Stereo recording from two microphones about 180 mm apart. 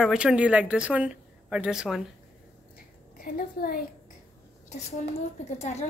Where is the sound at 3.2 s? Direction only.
55° left (ahead or behind).